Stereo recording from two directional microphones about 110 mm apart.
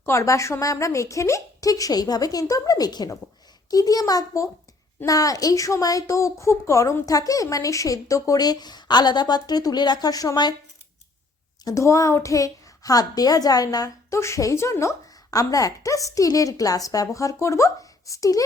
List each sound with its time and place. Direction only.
0.0 s a woman's voice: 25° left (ahead or behind)
11.6 s a woman's voice: 30° left (ahead or behind)